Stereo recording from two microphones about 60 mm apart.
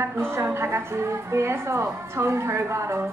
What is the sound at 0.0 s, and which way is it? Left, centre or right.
A woman's voice, right.